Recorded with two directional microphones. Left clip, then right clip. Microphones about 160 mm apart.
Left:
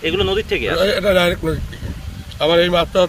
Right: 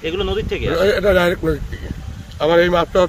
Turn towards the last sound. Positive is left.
turn(degrees=-35)  # may be behind; listen again after turning